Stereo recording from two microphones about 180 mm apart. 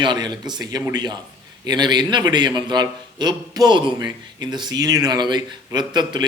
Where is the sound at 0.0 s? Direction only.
25° right (ahead or behind).